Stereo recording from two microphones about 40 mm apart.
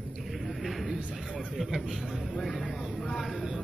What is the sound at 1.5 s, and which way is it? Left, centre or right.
Speech, centre.